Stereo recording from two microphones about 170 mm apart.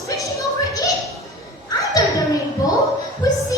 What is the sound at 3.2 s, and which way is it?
Music, 20° left (ahead or behind).